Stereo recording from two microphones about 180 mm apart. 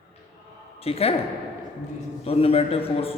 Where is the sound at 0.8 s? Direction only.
35° left (ahead or behind).